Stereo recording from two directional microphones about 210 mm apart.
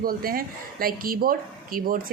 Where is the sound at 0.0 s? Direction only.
45° right (ahead or behind).